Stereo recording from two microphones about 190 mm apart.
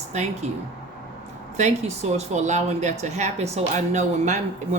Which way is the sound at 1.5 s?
35° right (ahead or behind).